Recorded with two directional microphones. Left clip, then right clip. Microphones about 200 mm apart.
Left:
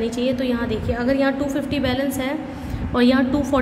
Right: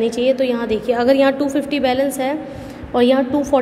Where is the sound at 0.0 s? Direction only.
25° right (ahead or behind).